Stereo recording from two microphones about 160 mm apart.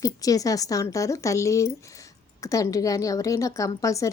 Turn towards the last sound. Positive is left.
turn(degrees=20)  # may be behind; listen again after turning